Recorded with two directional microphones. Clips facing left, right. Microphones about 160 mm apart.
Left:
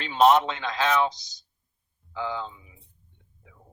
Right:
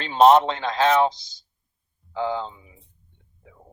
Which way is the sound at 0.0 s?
35° right (ahead or behind).